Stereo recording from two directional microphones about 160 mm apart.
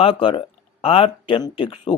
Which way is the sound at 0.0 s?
35° left (ahead or behind).